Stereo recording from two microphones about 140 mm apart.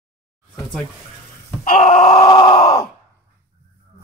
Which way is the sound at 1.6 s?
70° left (ahead or behind).